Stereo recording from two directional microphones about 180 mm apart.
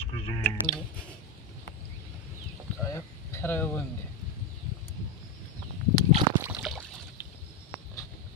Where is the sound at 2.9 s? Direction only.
15° left (ahead or behind).